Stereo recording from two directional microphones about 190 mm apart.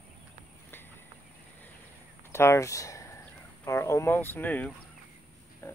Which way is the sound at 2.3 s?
15° left (ahead or behind).